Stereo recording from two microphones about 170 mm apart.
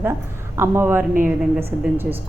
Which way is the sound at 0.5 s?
15° right (ahead or behind).